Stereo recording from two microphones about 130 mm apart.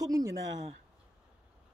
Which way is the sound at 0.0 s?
30° right (ahead or behind).